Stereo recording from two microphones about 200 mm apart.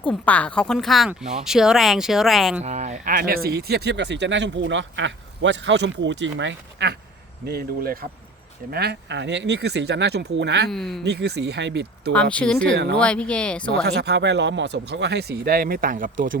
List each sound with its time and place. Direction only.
0.0 s speech: 5° left (ahead or behind)
2.6 s speech: 35° right (ahead or behind); by 10.7 s 60° right (ahead or behind)
10.7 s speech: centre (ahead or behind)
11.0 s speech: 55° right (ahead or behind)
12.3 s speech: 5° left (ahead or behind)
13.8 s speech: 55° right (ahead or behind)